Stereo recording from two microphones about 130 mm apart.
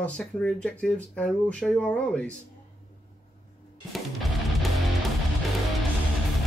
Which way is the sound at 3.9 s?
Centre (ahead or behind).